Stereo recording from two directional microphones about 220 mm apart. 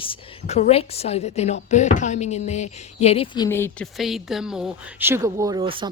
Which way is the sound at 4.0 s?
Centre (ahead or behind).